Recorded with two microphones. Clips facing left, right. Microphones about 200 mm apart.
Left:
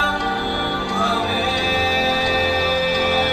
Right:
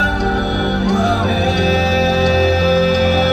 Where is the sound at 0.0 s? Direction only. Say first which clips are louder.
Right 5 dB; 45° right (ahead or behind).